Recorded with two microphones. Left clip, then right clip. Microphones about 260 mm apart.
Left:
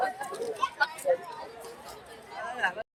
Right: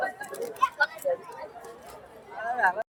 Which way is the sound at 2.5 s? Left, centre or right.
Right.